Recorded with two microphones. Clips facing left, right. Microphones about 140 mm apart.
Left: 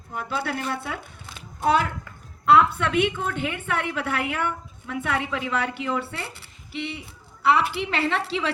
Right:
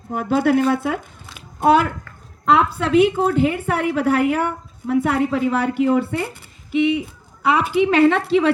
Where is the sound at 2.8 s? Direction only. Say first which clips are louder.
Right 8 dB; 35° right (ahead or behind).